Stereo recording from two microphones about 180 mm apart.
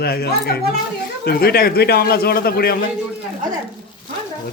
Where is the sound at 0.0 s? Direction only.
60° left (ahead or behind).